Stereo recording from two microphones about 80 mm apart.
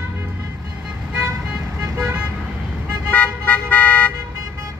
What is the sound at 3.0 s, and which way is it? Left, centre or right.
Car, centre.